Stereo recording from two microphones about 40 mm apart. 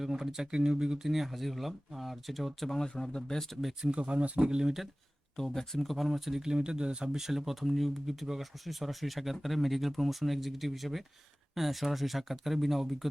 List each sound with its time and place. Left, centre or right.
0.0 s speech: centre
3.9 s speech: right
4.4 s speech: centre
5.4 s speech: centre